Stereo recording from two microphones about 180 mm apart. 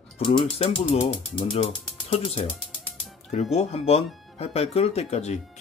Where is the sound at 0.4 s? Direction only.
30° left (ahead or behind).